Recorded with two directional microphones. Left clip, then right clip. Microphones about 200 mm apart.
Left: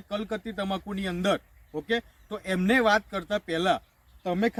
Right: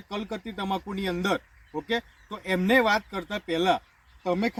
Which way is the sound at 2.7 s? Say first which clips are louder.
Even; 15° left (ahead or behind).